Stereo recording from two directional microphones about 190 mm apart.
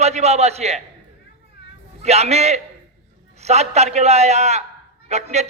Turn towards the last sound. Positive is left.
turn(degrees=-35)  # may be behind; listen again after turning